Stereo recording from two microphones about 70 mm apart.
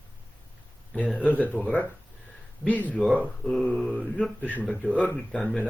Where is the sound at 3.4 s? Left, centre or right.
Centre.